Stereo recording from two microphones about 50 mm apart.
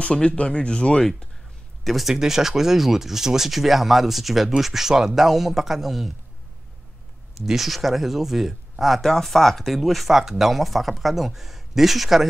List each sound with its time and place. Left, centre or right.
0.0 s speech: left
1.9 s speech: centre
7.3 s speech: centre